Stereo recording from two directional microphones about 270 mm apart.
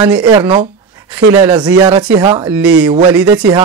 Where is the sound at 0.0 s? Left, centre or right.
Centre.